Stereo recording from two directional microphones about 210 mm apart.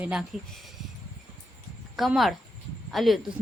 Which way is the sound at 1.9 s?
Centre (ahead or behind).